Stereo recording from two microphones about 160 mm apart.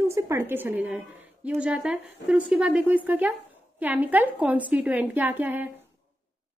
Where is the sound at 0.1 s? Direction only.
15° right (ahead or behind).